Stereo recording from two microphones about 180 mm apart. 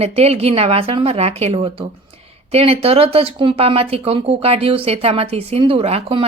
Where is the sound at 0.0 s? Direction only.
35° right (ahead or behind).